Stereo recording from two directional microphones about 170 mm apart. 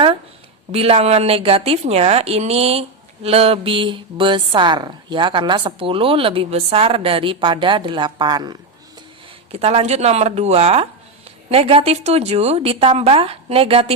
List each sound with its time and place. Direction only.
0.7 s speech: 35° right (ahead or behind)
9.5 s speech: 35° right (ahead or behind)